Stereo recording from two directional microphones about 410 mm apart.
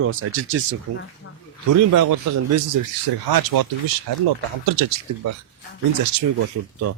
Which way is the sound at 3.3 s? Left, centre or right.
Right.